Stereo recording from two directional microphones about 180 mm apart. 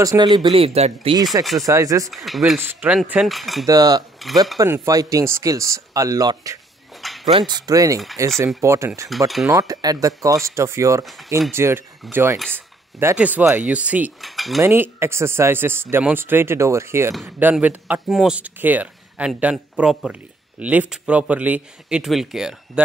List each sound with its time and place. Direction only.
0.0 s speech: 20° right (ahead or behind)
1.6 s speech: 20° right (ahead or behind)
2.0 s speech: centre (ahead or behind)
2.5 s speech: 10° right (ahead or behind)
3.6 s speech: 20° right (ahead or behind)
4.2 s speech: centre (ahead or behind)
4.6 s speech: 15° right (ahead or behind)
7.0 s a sound: centre (ahead or behind)
7.3 s speech: 25° right (ahead or behind); by 14.6 s centre (ahead or behind)
14.6 s speech: 15° right (ahead or behind)